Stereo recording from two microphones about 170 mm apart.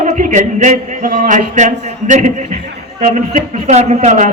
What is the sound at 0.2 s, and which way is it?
A man's voice, 45° right (ahead or behind).